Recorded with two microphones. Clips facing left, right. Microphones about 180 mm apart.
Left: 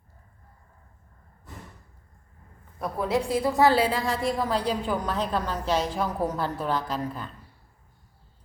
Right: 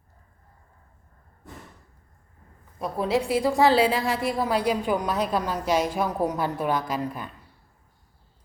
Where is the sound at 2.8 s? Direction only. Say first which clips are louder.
Right 1 dB; 20° right (ahead or behind).